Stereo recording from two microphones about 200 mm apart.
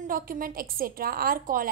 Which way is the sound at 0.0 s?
45° right (ahead or behind).